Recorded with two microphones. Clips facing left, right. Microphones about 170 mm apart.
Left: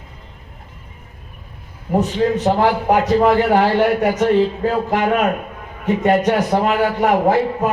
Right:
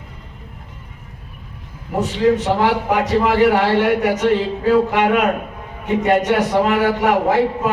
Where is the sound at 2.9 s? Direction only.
80° right.